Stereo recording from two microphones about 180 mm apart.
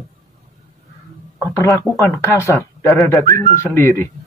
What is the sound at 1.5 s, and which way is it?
Speech, 15° left (ahead or behind).